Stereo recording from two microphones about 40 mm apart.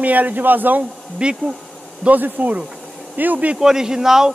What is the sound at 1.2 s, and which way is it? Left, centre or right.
Speech, right.